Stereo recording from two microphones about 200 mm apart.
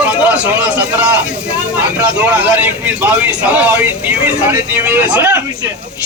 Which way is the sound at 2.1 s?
5° right (ahead or behind).